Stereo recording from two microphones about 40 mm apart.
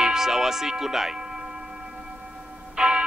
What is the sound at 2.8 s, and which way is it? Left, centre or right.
Music, right.